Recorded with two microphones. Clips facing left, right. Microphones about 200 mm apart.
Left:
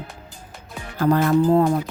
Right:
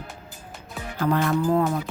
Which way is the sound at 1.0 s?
40° left (ahead or behind).